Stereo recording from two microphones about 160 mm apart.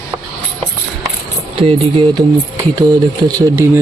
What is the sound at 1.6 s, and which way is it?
Speech, 40° right (ahead or behind).